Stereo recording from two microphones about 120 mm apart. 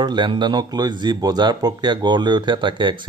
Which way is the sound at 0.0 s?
40° right (ahead or behind).